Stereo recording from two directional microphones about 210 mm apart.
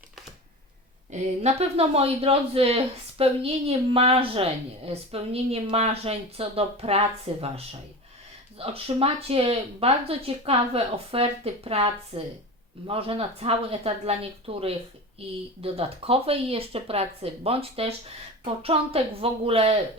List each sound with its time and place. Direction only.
1.1 s speech: 30° right (ahead or behind)
8.5 s speech: 25° right (ahead or behind)